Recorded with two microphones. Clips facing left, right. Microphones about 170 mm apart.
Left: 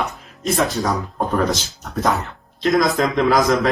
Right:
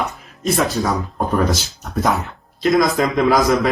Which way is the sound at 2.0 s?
Centre (ahead or behind).